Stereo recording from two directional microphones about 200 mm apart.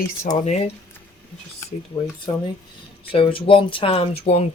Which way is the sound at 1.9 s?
25° left (ahead or behind).